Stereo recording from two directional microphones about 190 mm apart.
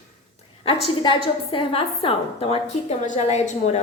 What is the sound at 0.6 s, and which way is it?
A woman's voice, 30° left (ahead or behind).